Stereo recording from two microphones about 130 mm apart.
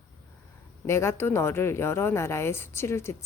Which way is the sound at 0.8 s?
20° left (ahead or behind).